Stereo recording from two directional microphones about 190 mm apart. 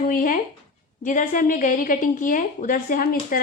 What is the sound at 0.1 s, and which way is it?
A woman's voice, 45° left (ahead or behind).